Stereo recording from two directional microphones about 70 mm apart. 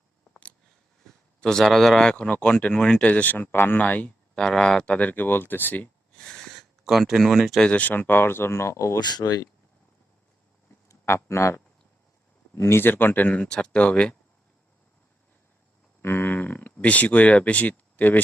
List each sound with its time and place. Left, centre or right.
1.4 s speech: centre
2.0 s speech: centre
6.1 s a sound: centre
7.6 s speech: centre; by 9.0 s left
9.0 s speech: left
10.7 s a sound: left
11.0 s speech: left; by 14.2 s centre
16.0 s speech: left